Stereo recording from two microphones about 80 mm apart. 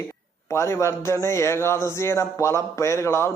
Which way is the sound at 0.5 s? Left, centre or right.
Left.